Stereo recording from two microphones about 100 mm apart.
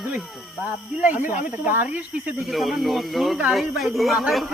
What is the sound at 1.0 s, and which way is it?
Speech, 20° right (ahead or behind).